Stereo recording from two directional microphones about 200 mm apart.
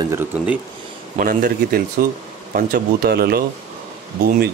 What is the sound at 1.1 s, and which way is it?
Speech, 45° right (ahead or behind).